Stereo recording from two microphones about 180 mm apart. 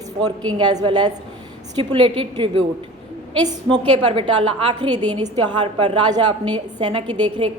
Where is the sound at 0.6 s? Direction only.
25° right (ahead or behind).